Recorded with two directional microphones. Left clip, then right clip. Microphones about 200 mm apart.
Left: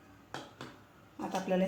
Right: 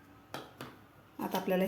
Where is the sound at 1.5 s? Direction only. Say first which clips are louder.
Even; 25° right (ahead or behind).